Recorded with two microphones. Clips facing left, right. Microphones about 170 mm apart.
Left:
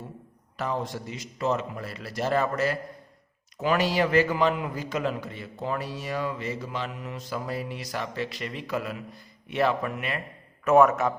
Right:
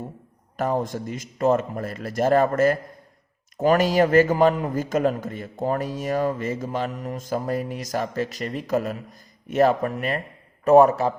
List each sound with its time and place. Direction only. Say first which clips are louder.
0.5 s a man's voice: right 6 dB; 45° right (ahead or behind)